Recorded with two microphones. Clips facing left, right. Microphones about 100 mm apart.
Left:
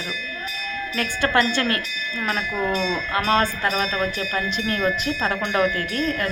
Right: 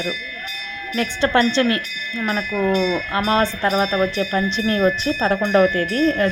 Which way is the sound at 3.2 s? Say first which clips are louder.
Right 2 dB; 20° right (ahead or behind).